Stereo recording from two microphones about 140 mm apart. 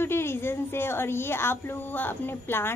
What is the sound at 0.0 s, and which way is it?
A woman's voice, 15° left (ahead or behind).